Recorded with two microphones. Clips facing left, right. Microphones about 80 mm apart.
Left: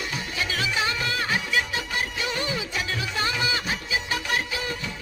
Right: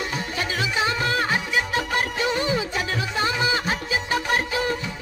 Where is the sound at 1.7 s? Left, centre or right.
Right.